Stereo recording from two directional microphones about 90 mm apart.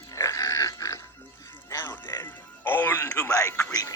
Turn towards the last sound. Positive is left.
turn(degrees=40)  # may be behind; listen again after turning